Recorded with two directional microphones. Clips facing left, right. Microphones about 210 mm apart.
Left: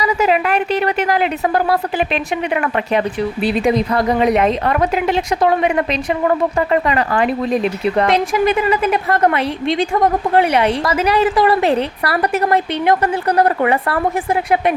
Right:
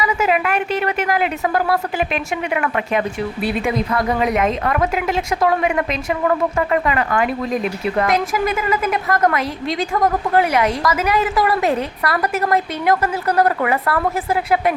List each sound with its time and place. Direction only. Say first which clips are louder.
0.0 s a woman's voice: left 3 dB; 35° left (ahead or behind)